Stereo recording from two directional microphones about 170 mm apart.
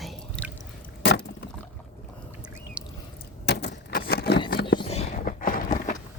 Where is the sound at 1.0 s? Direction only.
90° left.